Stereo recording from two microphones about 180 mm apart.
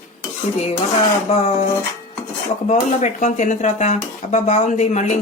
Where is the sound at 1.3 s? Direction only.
40° left (ahead or behind).